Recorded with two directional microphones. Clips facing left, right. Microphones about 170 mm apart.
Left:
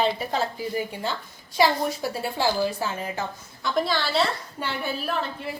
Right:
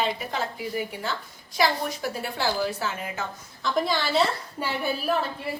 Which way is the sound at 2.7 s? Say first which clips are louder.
Left 2 dB; 35° left (ahead or behind).